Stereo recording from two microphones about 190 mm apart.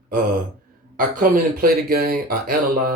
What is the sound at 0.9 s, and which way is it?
Speech, 50° right (ahead or behind).